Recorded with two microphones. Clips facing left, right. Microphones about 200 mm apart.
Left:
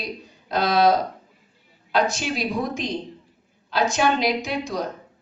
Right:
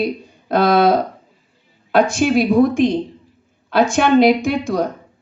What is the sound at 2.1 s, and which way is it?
A woman's voice, 55° right (ahead or behind).